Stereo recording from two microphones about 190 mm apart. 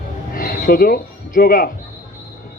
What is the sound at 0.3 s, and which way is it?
Speech, 50° left (ahead or behind).